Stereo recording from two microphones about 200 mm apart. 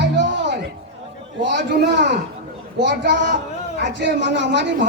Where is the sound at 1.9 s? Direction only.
60° right (ahead or behind).